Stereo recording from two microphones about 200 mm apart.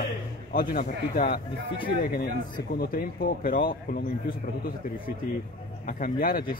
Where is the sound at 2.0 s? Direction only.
45° left (ahead or behind).